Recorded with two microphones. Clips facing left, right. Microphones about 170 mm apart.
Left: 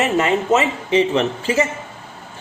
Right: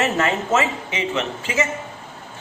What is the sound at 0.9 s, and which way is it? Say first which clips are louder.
Speech: left 8 dB; 35° left (ahead or behind).